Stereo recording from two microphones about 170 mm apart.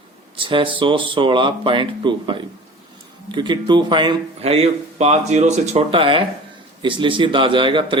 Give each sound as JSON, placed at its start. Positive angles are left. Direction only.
{"t": 0.3, "sound": "speech", "side_deg": -30}